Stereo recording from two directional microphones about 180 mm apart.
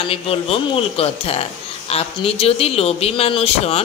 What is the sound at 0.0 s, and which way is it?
Speech, 30° left (ahead or behind).